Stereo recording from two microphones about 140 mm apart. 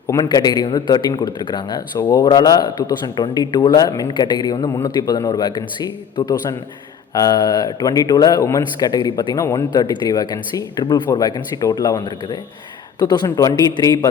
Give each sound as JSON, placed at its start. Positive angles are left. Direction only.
{"t": 0.1, "sound": "speech", "side_deg": 30}